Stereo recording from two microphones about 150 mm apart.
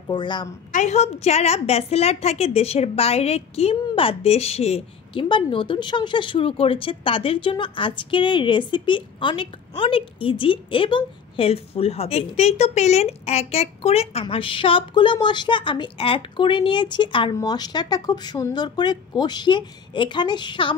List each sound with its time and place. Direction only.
0.1 s a woman's voice: 30° left (ahead or behind)
0.7 s a woman's voice: 55° left (ahead or behind); by 20.7 s 30° left (ahead or behind)